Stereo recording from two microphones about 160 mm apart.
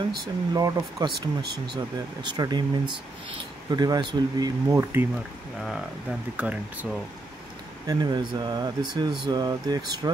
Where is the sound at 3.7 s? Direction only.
25° right (ahead or behind).